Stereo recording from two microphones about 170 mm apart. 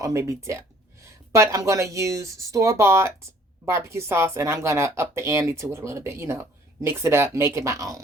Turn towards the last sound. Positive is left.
turn(degrees=-20)  # may be behind; listen again after turning